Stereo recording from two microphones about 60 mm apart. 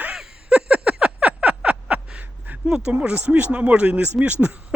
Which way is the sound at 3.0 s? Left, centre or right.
Right.